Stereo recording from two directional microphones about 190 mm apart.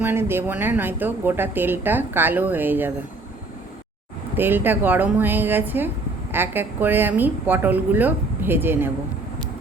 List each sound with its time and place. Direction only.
0.0 s a woman's voice: 10° right (ahead or behind)
4.4 s a woman's voice: 10° right (ahead or behind)